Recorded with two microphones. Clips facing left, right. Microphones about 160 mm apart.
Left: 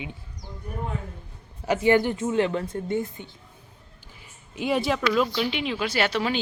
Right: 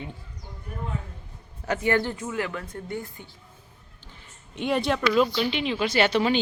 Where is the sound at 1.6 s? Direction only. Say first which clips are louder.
Left 4 dB; 15° left (ahead or behind).